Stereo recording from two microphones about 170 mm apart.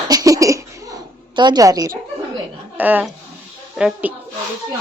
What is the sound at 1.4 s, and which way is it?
Speech, 25° right (ahead or behind).